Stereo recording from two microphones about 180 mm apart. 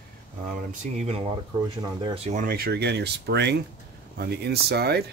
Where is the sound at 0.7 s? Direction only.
40° right (ahead or behind).